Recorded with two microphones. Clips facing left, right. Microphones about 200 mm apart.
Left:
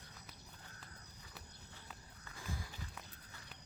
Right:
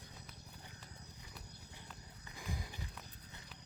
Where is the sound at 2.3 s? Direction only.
15° right (ahead or behind).